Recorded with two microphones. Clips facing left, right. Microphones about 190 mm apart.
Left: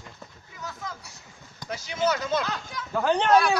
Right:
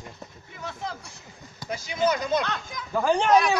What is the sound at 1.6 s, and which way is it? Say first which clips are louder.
Speech: right 2 dB; 10° right (ahead or behind).